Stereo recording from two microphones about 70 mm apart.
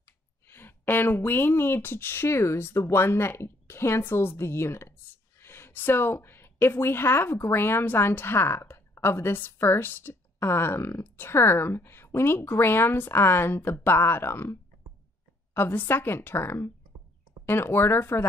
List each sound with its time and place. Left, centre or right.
0.5 s a woman's voice: left